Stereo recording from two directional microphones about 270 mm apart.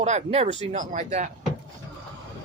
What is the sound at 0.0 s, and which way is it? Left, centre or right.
Male singing, right.